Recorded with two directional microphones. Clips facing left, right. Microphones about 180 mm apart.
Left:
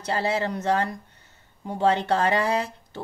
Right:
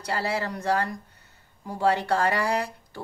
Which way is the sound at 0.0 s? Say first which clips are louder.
Left 3 dB; 25° left (ahead or behind).